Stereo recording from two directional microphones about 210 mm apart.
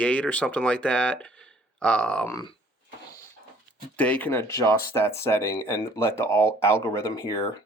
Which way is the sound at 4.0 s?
5° left (ahead or behind).